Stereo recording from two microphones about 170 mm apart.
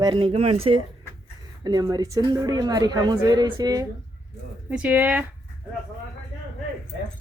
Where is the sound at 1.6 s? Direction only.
25° right (ahead or behind).